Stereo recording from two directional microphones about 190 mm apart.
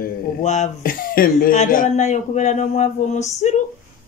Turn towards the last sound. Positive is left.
turn(degrees=35)  # may be behind; listen again after turning